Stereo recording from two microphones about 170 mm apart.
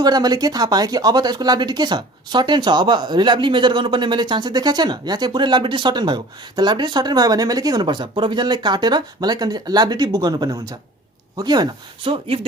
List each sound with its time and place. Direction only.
0.0 s speech: 25° right (ahead or behind)